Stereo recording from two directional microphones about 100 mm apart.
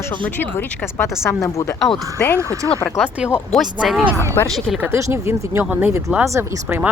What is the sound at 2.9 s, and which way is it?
Speech, 10° right (ahead or behind).